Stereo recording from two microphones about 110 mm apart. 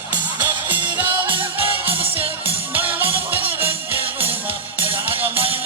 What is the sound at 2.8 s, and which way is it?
Music, 15° right (ahead or behind).